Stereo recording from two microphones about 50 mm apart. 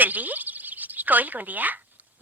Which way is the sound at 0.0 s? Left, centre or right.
Right.